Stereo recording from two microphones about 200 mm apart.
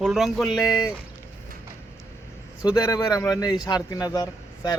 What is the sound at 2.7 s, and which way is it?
A man's voice, 20° left (ahead or behind).